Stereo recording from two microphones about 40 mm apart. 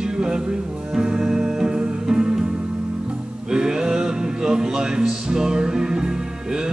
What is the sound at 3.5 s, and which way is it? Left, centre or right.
Music, centre.